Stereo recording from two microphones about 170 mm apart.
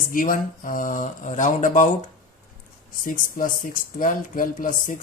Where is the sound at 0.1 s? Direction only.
55° left (ahead or behind).